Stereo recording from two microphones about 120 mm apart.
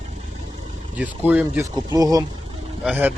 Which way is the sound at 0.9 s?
15° right (ahead or behind).